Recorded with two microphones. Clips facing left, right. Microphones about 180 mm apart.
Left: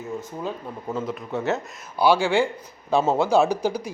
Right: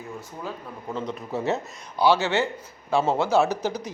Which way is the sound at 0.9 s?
Centre (ahead or behind).